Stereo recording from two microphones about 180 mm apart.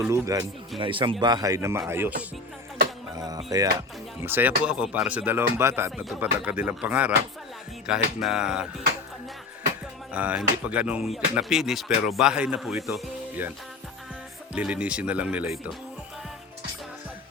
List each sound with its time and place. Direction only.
0.0 s speech: 15° right (ahead or behind)
0.8 s speech: 30° right (ahead or behind); by 2.1 s 10° right (ahead or behind)
3.2 s speech: 20° right (ahead or behind); by 8.6 s 5° right (ahead or behind)
10.1 s speech: 5° right (ahead or behind)
14.5 s speech: 5° right (ahead or behind)